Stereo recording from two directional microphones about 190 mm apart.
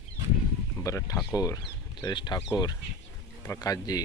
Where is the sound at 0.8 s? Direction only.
15° left (ahead or behind).